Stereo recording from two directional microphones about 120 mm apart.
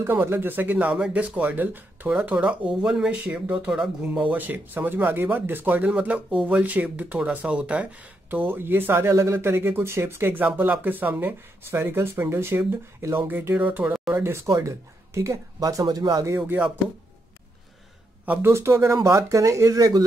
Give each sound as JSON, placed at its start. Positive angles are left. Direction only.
{"t": 0.0, "sound": "speech", "side_deg": -20}
{"t": 16.4, "sound": "speech", "side_deg": -10}
{"t": 18.2, "sound": "speech", "side_deg": -15}